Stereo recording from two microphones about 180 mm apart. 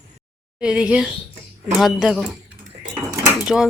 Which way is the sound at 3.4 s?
5° right (ahead or behind).